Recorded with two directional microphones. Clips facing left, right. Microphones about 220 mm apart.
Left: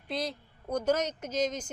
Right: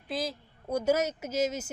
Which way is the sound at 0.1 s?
5° right (ahead or behind).